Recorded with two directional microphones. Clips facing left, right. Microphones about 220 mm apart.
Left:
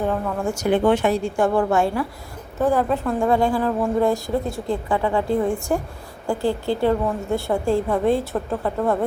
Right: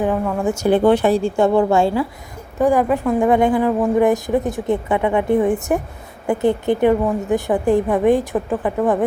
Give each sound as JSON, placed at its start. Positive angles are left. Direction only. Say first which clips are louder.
{"t": 0.0, "sound": "a woman's voice", "louder": "right 4 dB", "side_deg": -15}
{"t": 0.6, "sound": "a woman's voice", "louder": "right 4 dB", "side_deg": -35}
{"t": 1.4, "sound": "a woman's voice", "louder": "right 3 dB", "side_deg": -25}
{"t": 2.6, "sound": "a woman's voice", "louder": "right 4 dB", "side_deg": -15}